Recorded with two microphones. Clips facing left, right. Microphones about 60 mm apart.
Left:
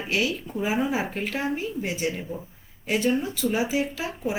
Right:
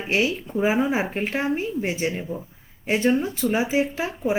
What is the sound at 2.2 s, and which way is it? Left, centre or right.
Speech, centre.